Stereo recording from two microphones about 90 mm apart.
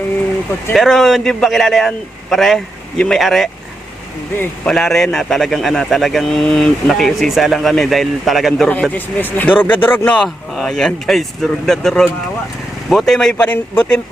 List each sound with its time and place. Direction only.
0.7 s a man's voice: centre (ahead or behind)
4.6 s a man's voice: 5° left (ahead or behind)
8.6 s speech: 15° left (ahead or behind)
10.2 s a man's voice: centre (ahead or behind)
13.4 s speech: 15° left (ahead or behind)